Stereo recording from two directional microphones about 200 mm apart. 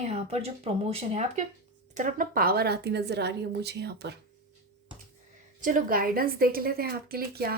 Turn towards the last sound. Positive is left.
turn(degrees=-50)  # may be behind; listen again after turning